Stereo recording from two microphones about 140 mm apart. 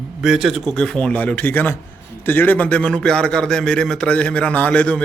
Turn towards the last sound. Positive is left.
turn(degrees=10)  # may be behind; listen again after turning